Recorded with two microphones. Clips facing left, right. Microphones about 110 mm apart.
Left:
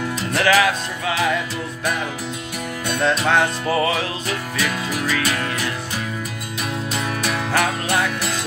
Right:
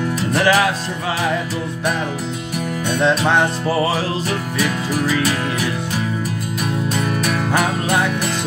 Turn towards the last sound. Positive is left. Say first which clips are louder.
# right 2 dB
turn(degrees=-15)  # may be behind; listen again after turning